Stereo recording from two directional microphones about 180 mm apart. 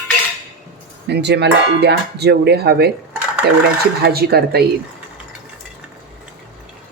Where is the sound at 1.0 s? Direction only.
70° right (ahead or behind).